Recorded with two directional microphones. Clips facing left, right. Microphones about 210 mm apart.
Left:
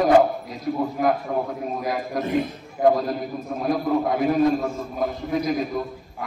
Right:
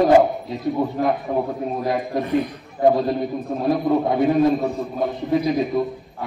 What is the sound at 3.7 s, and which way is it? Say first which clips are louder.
A man's voice: right 2 dB; centre (ahead or behind).